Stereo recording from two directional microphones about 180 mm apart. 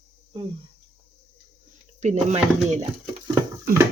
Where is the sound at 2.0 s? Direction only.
40° right (ahead or behind).